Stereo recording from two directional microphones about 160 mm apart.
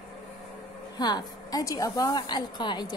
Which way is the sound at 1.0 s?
25° left (ahead or behind).